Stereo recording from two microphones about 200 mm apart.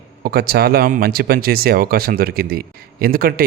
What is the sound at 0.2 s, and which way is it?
A man's voice, 50° right (ahead or behind).